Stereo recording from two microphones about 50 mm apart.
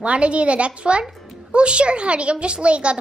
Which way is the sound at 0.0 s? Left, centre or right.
Right.